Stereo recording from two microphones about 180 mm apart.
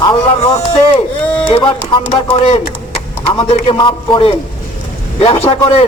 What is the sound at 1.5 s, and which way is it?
Speech, 30° left (ahead or behind).